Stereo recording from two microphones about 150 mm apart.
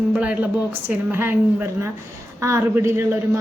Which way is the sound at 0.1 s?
10° right (ahead or behind).